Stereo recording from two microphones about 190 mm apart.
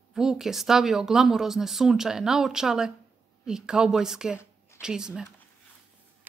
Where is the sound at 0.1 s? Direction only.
Centre (ahead or behind).